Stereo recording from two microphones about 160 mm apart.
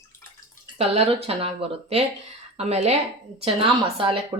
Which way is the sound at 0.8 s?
40° right (ahead or behind).